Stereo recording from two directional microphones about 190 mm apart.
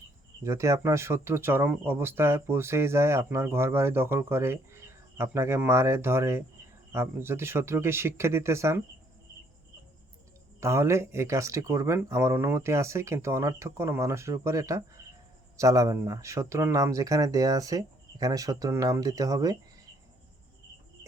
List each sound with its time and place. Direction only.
0.4 s speech: 15° right (ahead or behind)
10.6 s speech: 15° right (ahead or behind)